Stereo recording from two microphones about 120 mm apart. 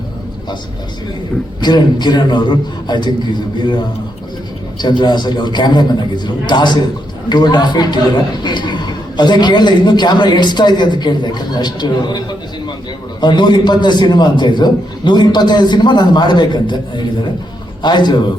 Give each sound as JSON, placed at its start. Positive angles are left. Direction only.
{"t": 1.6, "sound": "a man's voice", "side_deg": 35}
{"t": 4.8, "sound": "a man's voice", "side_deg": 35}
{"t": 13.2, "sound": "a man's voice", "side_deg": 40}